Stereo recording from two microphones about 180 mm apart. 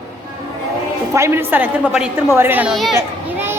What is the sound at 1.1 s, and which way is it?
A woman's voice, 15° right (ahead or behind).